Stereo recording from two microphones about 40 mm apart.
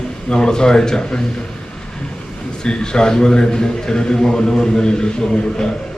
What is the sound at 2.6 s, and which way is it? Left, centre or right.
A man's voice, centre.